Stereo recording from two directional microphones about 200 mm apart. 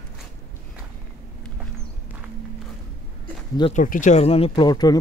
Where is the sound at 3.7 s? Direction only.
40° left (ahead or behind); by 5.0 s 20° left (ahead or behind).